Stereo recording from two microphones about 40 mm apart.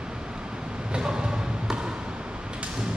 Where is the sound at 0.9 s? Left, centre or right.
Centre.